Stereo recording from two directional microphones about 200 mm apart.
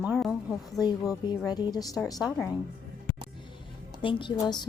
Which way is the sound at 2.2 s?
5° left (ahead or behind).